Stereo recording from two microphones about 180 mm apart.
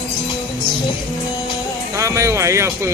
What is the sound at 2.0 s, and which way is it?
Speech, 15° right (ahead or behind).